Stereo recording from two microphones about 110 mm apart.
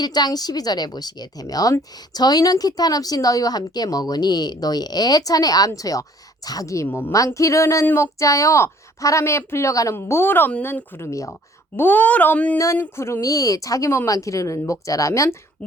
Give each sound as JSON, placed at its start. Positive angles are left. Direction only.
{"t": 0.0, "sound": "a woman's voice", "side_deg": 40}
{"t": 6.8, "sound": "speech", "side_deg": 15}
{"t": 7.3, "sound": "a woman's voice", "side_deg": 30}
{"t": 11.8, "sound": "speech", "side_deg": 15}
{"t": 12.5, "sound": "a woman's voice", "side_deg": 30}